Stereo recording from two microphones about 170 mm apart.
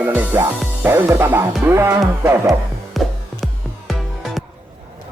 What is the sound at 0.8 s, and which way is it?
Music, 15° right (ahead or behind).